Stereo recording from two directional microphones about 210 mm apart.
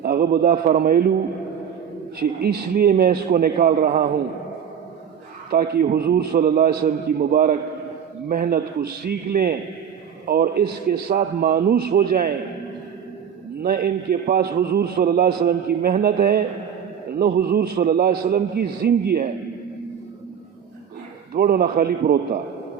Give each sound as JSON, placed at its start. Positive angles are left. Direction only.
{"t": 0.0, "sound": "a man's voice", "side_deg": -45}
{"t": 2.1, "sound": "a man's voice", "side_deg": -45}
{"t": 5.5, "sound": "a man's voice", "side_deg": -45}
{"t": 13.6, "sound": "a man's voice", "side_deg": -45}
{"t": 21.3, "sound": "a man's voice", "side_deg": -45}